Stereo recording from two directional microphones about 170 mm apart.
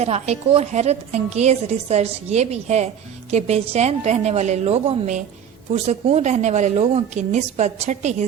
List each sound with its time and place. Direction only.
0.0 s a woman's voice: 40° right (ahead or behind)